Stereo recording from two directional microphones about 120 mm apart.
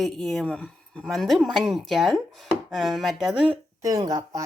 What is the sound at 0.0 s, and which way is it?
Speech, 5° left (ahead or behind).